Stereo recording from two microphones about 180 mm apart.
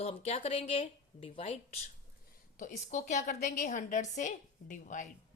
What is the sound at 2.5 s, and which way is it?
A woman's voice, 45° left (ahead or behind).